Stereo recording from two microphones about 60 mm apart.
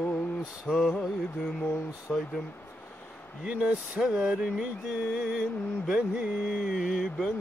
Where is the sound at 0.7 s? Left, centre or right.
Centre.